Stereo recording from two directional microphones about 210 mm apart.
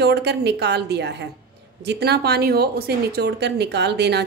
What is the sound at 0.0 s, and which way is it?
A woman's voice, 50° right (ahead or behind).